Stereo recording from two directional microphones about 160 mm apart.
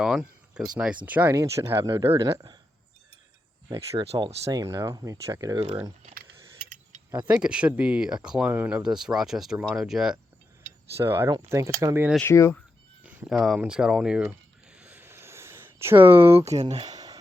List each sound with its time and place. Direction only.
0.0 s a sound: 5° right (ahead or behind)
1.0 s speech: 10° right (ahead or behind); by 2.3 s 30° right (ahead or behind)
3.9 s speech: 35° right (ahead or behind)
4.5 s speech: 20° right (ahead or behind)
7.3 s speech: 5° right (ahead or behind)
10.9 s speech: 15° right (ahead or behind)
12.2 s speech: 15° left (ahead or behind)
13.1 s a sound: 5° right (ahead or behind); by 17.2 s 25° right (ahead or behind)